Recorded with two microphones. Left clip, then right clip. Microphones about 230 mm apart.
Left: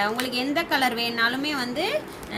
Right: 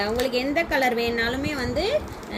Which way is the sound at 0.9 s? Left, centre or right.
Left.